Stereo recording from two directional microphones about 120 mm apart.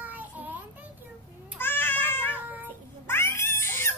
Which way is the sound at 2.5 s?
15° right (ahead or behind).